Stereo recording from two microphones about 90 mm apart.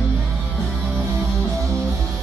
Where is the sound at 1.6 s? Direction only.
5° left (ahead or behind).